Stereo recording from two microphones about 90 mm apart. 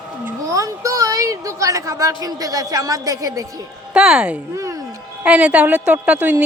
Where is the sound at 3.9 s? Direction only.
10° right (ahead or behind).